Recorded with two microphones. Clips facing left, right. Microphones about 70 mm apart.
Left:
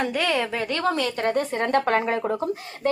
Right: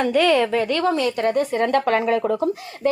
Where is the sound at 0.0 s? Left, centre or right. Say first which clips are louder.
Right 7 dB; left.